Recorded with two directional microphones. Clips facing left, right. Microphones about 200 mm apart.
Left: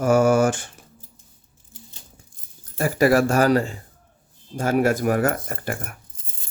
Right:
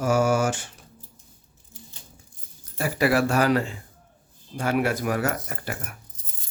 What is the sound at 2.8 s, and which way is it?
Speech, 45° left (ahead or behind).